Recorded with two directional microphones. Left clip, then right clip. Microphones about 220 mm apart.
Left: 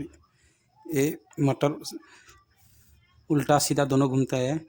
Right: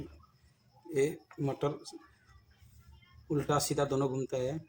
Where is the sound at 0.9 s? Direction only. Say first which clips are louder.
Left 5 dB; 50° left (ahead or behind).